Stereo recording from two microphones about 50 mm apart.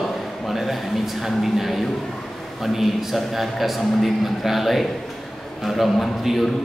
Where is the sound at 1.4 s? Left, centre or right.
Centre.